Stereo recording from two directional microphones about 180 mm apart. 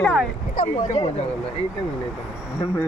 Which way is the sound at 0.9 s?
40° left (ahead or behind).